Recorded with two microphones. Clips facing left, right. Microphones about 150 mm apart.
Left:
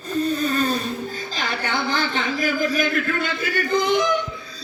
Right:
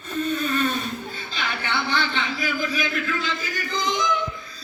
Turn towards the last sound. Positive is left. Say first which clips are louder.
# left 7 dB
turn(degrees=60)  # may be behind; listen again after turning